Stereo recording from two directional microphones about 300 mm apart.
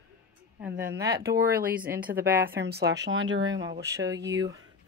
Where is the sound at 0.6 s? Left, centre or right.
Centre.